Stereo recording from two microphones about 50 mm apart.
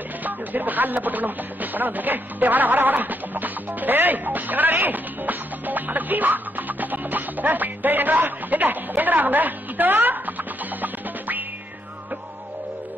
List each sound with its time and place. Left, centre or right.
0.2 s speech: right